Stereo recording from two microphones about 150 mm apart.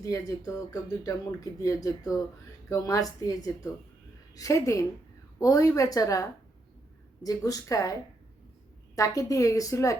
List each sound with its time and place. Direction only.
0.0 s speech: 20° left (ahead or behind)
9.0 s speech: 20° left (ahead or behind)